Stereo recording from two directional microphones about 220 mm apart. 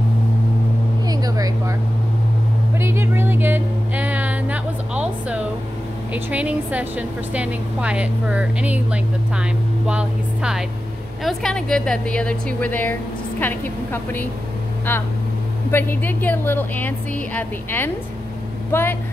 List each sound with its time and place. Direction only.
1.0 s vehicle: 15° right (ahead or behind)
2.8 s music: 10° right (ahead or behind)
6.1 s a woman's voice: 5° right (ahead or behind); by 18.9 s 10° left (ahead or behind)